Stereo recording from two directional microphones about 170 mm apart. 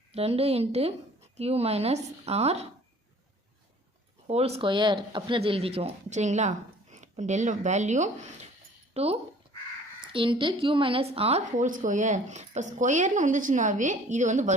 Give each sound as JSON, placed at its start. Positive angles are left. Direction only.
{"t": 0.1, "sound": "speech", "side_deg": -35}
{"t": 4.3, "sound": "a woman's voice", "side_deg": -35}